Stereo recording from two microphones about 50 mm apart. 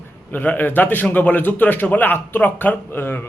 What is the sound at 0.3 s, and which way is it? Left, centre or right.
Speech, left.